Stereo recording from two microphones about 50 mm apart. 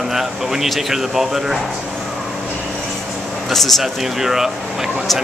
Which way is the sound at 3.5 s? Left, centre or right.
Centre.